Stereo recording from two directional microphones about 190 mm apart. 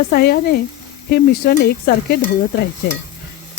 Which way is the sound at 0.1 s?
55° left (ahead or behind).